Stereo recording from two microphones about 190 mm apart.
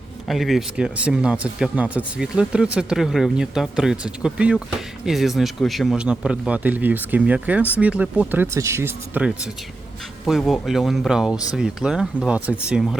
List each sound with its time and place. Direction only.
0.3 s speech: centre (ahead or behind)